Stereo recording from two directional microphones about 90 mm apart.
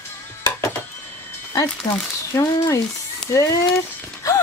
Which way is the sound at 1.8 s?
55° left (ahead or behind).